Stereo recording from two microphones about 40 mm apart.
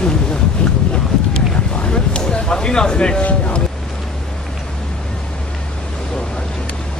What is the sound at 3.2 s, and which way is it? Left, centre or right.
Speech, left.